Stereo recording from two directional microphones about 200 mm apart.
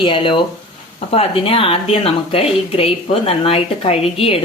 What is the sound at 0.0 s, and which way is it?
Speech, 25° left (ahead or behind).